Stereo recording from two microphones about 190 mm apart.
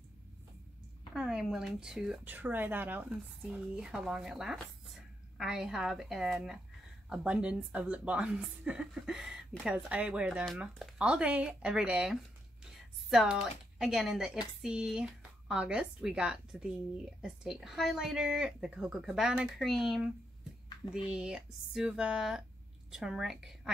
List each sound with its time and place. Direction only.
1.1 s a woman's voice: centre (ahead or behind)